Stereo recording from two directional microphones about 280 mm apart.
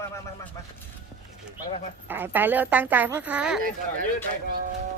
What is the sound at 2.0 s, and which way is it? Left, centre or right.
Speech, centre.